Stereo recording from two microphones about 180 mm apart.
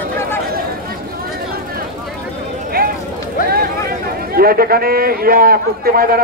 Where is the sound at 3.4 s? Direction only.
55° right (ahead or behind).